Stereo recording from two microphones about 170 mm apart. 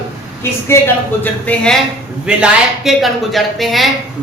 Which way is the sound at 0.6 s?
15° left (ahead or behind).